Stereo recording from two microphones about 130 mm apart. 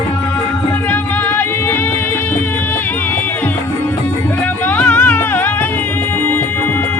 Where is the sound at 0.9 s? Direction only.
15° left (ahead or behind).